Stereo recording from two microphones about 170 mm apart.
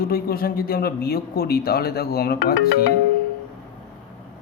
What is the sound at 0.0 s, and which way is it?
Speech, 60° left (ahead or behind).